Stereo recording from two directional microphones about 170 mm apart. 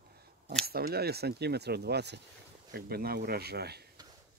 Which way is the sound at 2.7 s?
65° right (ahead or behind).